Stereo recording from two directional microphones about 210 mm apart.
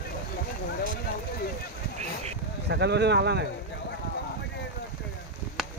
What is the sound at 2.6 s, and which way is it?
Speech, 55° right (ahead or behind).